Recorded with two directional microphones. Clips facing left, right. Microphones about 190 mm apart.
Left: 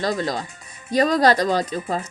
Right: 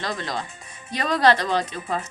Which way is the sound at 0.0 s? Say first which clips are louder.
Left 6 dB; 40° left (ahead or behind).